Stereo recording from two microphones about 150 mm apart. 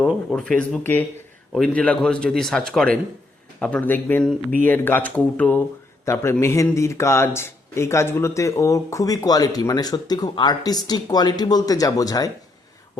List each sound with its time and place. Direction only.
0.0 s a man's voice: 5° left (ahead or behind); by 12.3 s 25° left (ahead or behind)